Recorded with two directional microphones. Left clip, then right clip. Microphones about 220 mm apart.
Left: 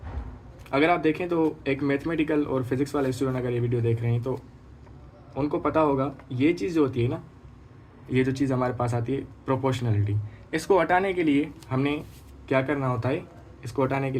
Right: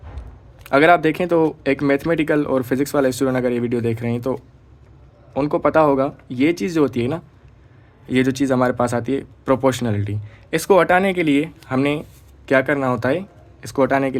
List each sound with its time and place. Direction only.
0.6 s speech: 50° right (ahead or behind)